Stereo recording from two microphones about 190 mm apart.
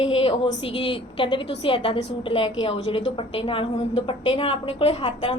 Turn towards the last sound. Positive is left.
turn(degrees=30)  # may be behind; listen again after turning